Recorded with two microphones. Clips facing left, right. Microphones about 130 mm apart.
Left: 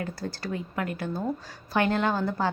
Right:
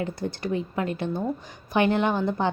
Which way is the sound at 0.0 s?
20° right (ahead or behind).